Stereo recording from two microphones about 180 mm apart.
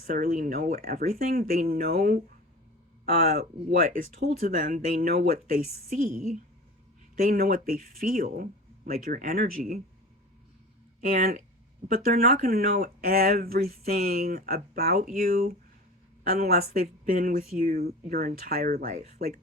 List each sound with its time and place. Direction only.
0.1 s speech: 50° right (ahead or behind)
3.3 s speech: 55° right (ahead or behind)
7.2 s speech: 50° right (ahead or behind)
11.0 s speech: 50° right (ahead or behind)